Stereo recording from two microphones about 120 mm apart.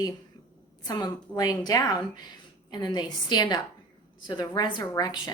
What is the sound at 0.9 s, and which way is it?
A woman's voice, 35° left (ahead or behind).